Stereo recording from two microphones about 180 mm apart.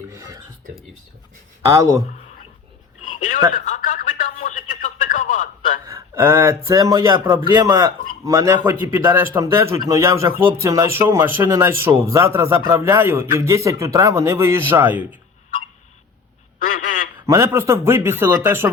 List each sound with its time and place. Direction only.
0.1 s speech: 20° right (ahead or behind)
1.6 s speech: 15° right (ahead or behind)
3.5 s speech: 45° left (ahead or behind)
5.8 s speech: 15° right (ahead or behind)
16.6 s quack: 45° left (ahead or behind)
17.2 s speech: 15° right (ahead or behind)